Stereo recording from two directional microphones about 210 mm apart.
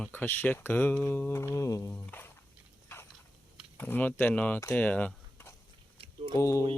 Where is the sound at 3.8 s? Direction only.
10° left (ahead or behind).